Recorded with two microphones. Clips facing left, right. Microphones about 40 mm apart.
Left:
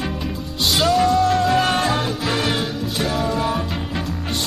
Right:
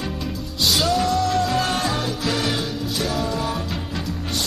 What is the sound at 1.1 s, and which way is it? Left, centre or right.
Music, left.